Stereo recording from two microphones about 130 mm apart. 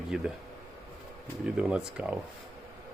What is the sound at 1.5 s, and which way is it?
Speech, 5° right (ahead or behind).